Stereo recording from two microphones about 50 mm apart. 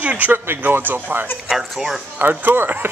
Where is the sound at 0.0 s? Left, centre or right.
Right.